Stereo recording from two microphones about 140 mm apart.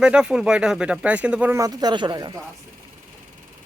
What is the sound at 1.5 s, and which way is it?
Speech, 25° right (ahead or behind).